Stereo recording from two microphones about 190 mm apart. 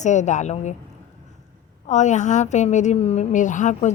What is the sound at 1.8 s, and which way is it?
A woman's voice, 40° left (ahead or behind).